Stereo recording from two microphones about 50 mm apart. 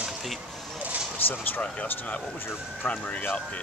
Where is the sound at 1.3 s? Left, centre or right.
Left.